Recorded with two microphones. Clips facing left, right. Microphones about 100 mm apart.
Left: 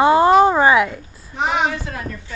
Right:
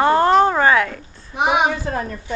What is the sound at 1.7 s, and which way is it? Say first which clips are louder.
Speech: right 4 dB; 35° right (ahead or behind).